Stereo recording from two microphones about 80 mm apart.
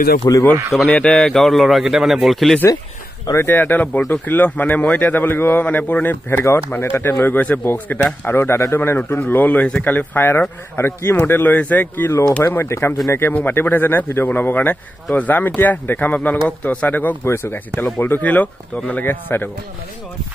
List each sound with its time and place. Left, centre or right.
0.2 s speech: left
0.8 s a man's voice: centre
3.3 s speech: left
6.4 s speech: left
8.4 s speech: left
12.1 s speech: left